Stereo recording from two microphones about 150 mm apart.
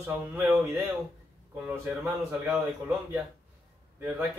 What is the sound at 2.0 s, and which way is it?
A man's voice, 10° right (ahead or behind).